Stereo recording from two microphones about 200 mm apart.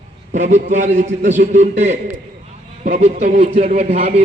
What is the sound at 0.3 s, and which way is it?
A man's voice, 35° right (ahead or behind).